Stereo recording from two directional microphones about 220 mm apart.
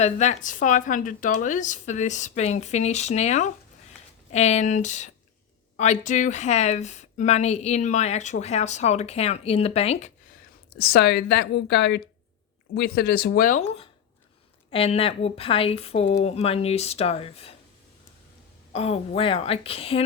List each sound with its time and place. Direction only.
0.0 s speech: 30° left (ahead or behind)
10.8 s speech: 45° left (ahead or behind); by 17.5 s 25° left (ahead or behind)
18.7 s speech: 25° left (ahead or behind)